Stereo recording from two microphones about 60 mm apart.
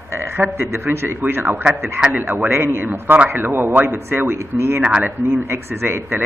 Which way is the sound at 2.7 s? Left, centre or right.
Right.